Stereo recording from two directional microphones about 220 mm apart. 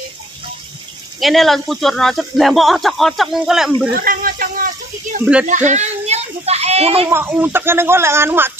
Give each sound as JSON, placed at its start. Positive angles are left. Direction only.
{"t": 1.2, "sound": "speech", "side_deg": 0}
{"t": 3.9, "sound": "speech", "side_deg": -40}
{"t": 5.2, "sound": "speech", "side_deg": -5}
{"t": 5.5, "sound": "children playing", "side_deg": -30}
{"t": 7.1, "sound": "speech", "side_deg": -10}